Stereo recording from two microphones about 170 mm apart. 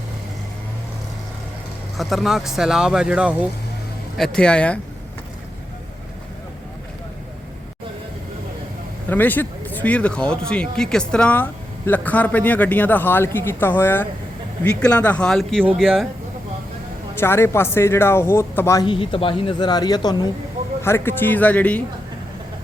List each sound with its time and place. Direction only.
2.0 s speech: centre (ahead or behind)
9.0 s speech: 10° left (ahead or behind)
17.2 s speech: 15° left (ahead or behind)
18.9 s a woman's voice: 30° left (ahead or behind); by 21.8 s 10° left (ahead or behind)